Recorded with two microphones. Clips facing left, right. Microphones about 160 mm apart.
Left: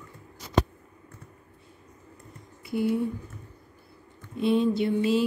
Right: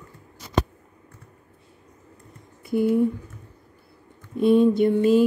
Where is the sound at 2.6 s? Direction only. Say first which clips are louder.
Right 6 dB; 50° right (ahead or behind).